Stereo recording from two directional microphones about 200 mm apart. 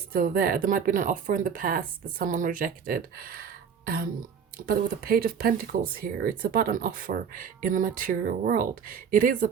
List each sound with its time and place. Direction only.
0.1 s speech: 45° right (ahead or behind)